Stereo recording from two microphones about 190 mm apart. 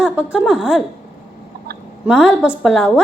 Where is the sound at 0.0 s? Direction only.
5° right (ahead or behind).